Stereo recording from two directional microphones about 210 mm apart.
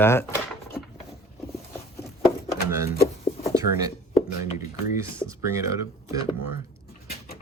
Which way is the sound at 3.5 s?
15° right (ahead or behind).